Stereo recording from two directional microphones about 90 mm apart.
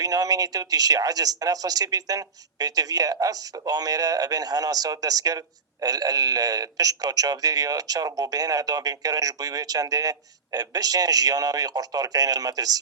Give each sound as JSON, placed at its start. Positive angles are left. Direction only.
{"t": 0.0, "sound": "speech", "side_deg": -45}